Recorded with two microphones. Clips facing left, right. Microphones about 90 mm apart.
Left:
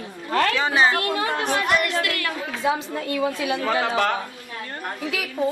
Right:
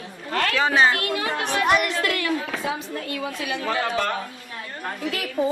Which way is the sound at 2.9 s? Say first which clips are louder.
Left 5 dB; 25° left (ahead or behind).